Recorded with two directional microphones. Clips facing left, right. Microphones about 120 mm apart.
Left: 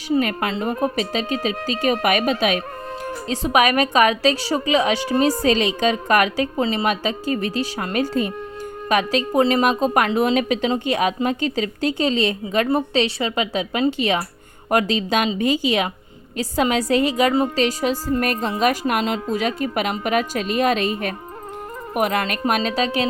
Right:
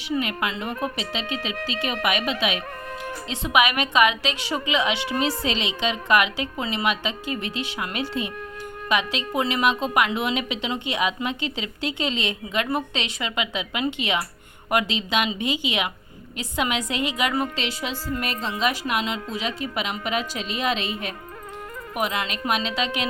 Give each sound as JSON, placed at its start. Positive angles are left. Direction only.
{"t": 0.2, "sound": "a woman's voice", "side_deg": 45}